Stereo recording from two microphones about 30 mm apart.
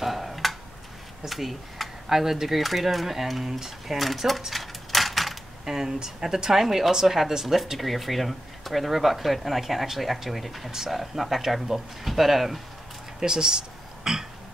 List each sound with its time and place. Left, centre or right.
0.0 s tick-tock: centre
1.3 s speech: centre
2.0 s speech: centre
3.4 s speech: centre
3.8 s speech: centre
4.5 s coin: centre
5.7 s speech: centre
13.2 s speech: right